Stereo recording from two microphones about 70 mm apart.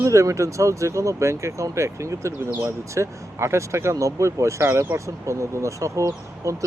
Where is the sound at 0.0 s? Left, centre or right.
Right.